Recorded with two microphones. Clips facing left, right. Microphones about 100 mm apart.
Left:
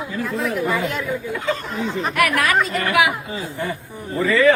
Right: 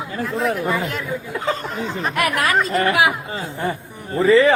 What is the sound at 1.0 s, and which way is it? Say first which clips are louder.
Speech: even; 35° right (ahead or behind).